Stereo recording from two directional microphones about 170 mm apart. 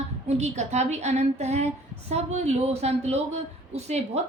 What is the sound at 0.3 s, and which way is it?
A woman's voice, 40° right (ahead or behind).